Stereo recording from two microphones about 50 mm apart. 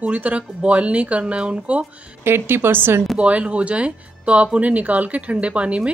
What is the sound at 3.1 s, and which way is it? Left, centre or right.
A woman's voice, right.